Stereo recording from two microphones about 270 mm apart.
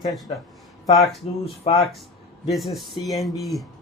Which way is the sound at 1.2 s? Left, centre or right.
Left.